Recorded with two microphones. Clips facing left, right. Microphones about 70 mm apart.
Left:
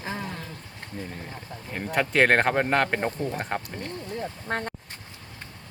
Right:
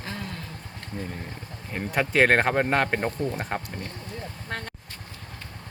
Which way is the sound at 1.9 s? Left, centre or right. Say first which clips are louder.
Even; centre.